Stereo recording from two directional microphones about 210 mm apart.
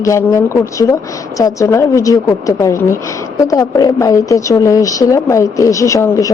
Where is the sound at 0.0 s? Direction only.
15° left (ahead or behind).